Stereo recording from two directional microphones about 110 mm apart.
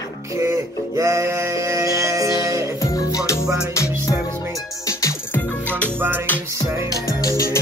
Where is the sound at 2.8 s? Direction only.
30° left (ahead or behind).